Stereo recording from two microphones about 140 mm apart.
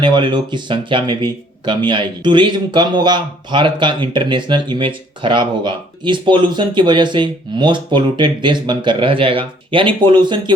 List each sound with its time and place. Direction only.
0.0 s speech: 35° right (ahead or behind)